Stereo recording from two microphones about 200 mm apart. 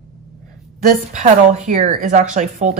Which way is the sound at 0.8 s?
40° right (ahead or behind).